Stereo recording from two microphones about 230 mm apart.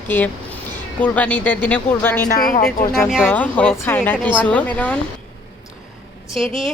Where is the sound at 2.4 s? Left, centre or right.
Left.